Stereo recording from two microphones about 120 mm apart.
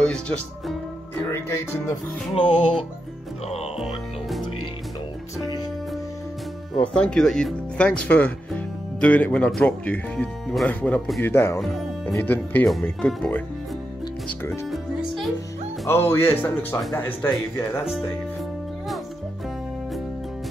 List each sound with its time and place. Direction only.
0.0 s speech: 10° left (ahead or behind)
1.3 s music: 20° left (ahead or behind)
3.8 s music: centre (ahead or behind)
6.8 s speech: 10° left (ahead or behind)
14.7 s music: centre (ahead or behind)
15.9 s speech: 20° left (ahead or behind)